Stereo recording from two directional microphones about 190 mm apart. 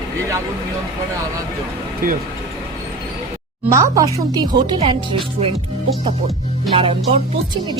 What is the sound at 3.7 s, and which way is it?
Speech, 20° right (ahead or behind).